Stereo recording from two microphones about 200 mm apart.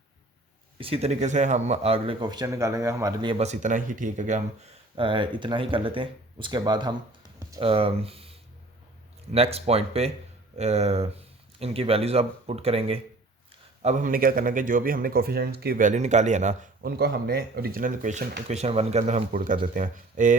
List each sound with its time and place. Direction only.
0.8 s speech: 30° right (ahead or behind)
4.9 s speech: 25° right (ahead or behind)
13.8 s speech: 45° right (ahead or behind)
17.0 s speech: 50° right (ahead or behind)